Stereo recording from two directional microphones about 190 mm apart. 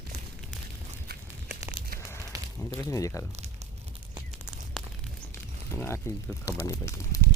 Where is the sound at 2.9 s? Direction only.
15° left (ahead or behind).